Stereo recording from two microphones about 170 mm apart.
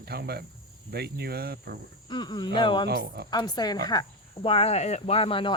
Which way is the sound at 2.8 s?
70° right (ahead or behind).